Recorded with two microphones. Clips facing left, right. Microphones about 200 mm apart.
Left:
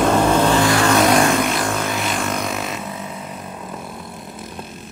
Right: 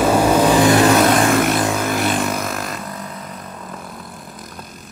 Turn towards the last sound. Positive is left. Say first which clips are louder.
# left 1 dB
turn(degrees=5)  # may be behind; listen again after turning